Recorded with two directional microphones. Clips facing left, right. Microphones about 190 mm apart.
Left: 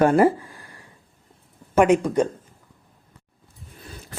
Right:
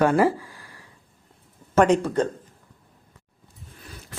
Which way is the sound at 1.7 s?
10° left (ahead or behind).